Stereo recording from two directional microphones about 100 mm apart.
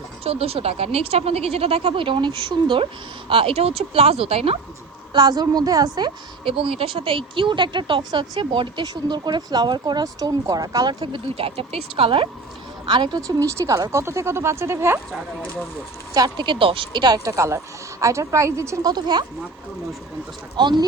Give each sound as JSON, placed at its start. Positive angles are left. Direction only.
{"t": 0.3, "sound": "speech", "side_deg": -75}
{"t": 5.1, "sound": "speech", "side_deg": -45}
{"t": 6.4, "sound": "speech", "side_deg": -65}
{"t": 11.0, "sound": "speech", "side_deg": -65}
{"t": 12.8, "sound": "speech", "side_deg": -50}
{"t": 16.1, "sound": "a woman's voice", "side_deg": -45}
{"t": 18.9, "sound": "speech", "side_deg": -45}
{"t": 20.6, "sound": "speech", "side_deg": -50}